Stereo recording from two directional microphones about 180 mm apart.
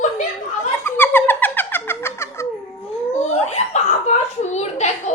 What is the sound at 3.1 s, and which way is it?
Giggle, 40° left (ahead or behind).